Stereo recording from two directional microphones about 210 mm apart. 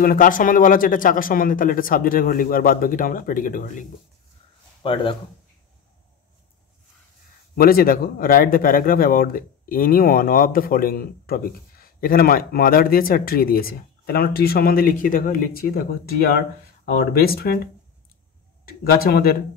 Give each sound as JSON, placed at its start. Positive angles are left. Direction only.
{"t": 0.0, "sound": "speech", "side_deg": 40}
{"t": 4.8, "sound": "speech", "side_deg": 25}
{"t": 7.5, "sound": "speech", "side_deg": 45}
{"t": 18.7, "sound": "speech", "side_deg": 45}